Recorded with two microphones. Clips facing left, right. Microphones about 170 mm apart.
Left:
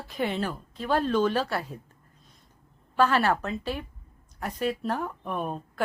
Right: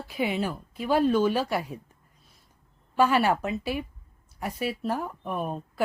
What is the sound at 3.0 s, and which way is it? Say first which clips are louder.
A woman's voice: right 1 dB; 10° right (ahead or behind).